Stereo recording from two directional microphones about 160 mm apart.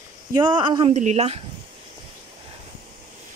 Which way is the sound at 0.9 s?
45° right (ahead or behind).